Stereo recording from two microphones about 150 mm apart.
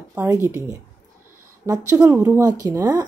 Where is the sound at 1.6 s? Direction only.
20° right (ahead or behind).